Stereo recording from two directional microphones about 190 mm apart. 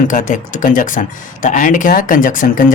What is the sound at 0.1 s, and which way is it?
Speech, 45° left (ahead or behind).